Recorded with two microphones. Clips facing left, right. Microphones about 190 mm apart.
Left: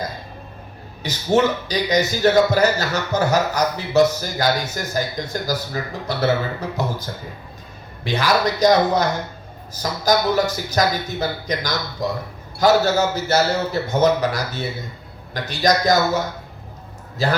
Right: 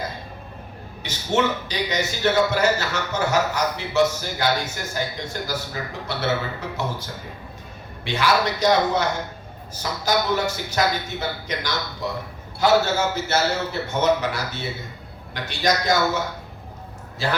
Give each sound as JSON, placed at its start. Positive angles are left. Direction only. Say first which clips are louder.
{"t": 1.0, "sound": "a man's voice", "louder": "left 5 dB", "side_deg": 40}
{"t": 8.0, "sound": "a man's voice", "louder": "left 2 dB", "side_deg": 40}